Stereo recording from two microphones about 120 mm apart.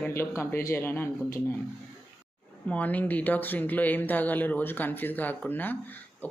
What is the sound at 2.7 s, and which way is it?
Speech, 15° left (ahead or behind).